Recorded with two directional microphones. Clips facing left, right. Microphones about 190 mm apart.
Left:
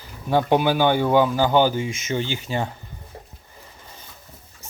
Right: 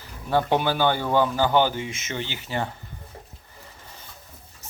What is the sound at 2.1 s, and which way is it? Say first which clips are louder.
Speech: left 5 dB; 15° left (ahead or behind).